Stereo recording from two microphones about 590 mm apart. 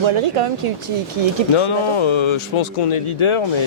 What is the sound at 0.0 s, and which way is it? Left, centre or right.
Speech, right.